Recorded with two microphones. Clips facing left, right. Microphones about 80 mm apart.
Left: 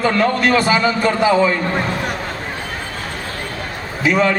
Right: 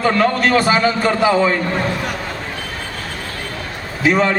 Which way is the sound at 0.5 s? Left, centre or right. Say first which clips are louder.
Right 2 dB; right.